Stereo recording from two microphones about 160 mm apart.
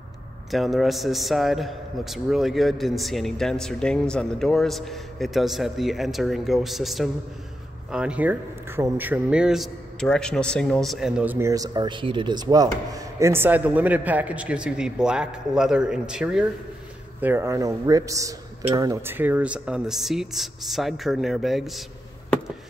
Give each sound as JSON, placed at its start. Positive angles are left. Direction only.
{"t": 0.5, "sound": "a man's voice", "side_deg": 0}
{"t": 17.2, "sound": "a man's voice", "side_deg": -15}